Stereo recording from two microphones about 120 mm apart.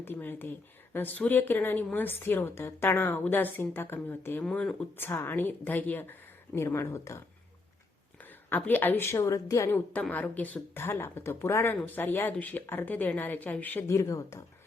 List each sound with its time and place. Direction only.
0.0 s speech: 15° left (ahead or behind)
4.4 s speech: 5° left (ahead or behind)
4.9 s speech: 20° left (ahead or behind)
8.2 s a woman's voice: 15° left (ahead or behind)